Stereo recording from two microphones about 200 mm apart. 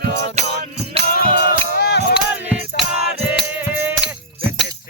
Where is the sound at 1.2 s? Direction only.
50° left (ahead or behind).